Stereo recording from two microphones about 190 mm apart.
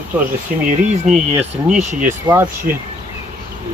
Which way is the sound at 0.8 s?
40° right (ahead or behind).